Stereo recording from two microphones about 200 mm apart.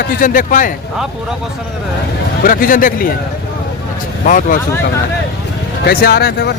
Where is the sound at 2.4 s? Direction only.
45° left (ahead or behind).